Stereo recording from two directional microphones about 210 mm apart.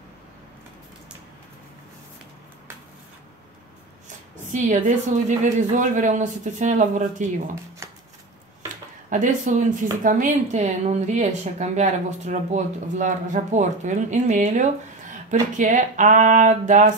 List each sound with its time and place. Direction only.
4.5 s speech: 35° right (ahead or behind)
9.1 s speech: 35° right (ahead or behind)